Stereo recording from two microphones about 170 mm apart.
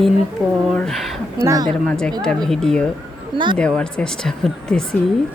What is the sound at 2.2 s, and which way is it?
Speech, 5° left (ahead or behind).